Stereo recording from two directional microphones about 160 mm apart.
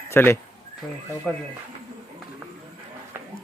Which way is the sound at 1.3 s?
5° left (ahead or behind).